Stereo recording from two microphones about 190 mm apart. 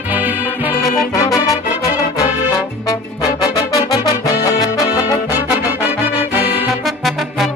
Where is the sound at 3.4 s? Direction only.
20° left (ahead or behind).